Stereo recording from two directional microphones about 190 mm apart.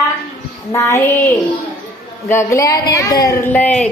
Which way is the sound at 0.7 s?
15° left (ahead or behind).